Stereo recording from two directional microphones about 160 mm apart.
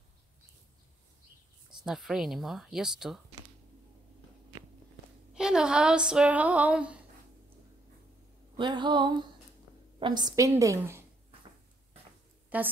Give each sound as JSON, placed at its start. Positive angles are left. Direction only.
{"t": 1.9, "sound": "speech", "side_deg": 0}
{"t": 5.3, "sound": "speech", "side_deg": -5}
{"t": 8.5, "sound": "a woman's voice", "side_deg": -30}
{"t": 12.5, "sound": "a woman's voice", "side_deg": -10}